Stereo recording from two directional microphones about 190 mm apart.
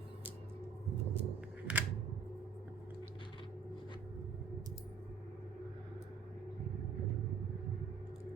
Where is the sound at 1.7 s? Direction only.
5° right (ahead or behind).